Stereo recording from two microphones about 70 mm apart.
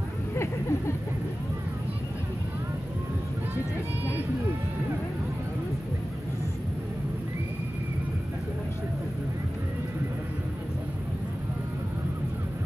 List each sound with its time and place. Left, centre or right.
0.4 s vehicle: left